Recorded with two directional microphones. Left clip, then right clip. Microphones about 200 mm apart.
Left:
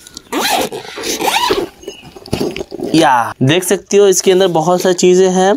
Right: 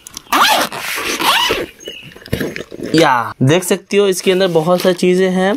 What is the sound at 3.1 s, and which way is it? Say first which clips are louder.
Speech: left 2 dB; 35° right (ahead or behind).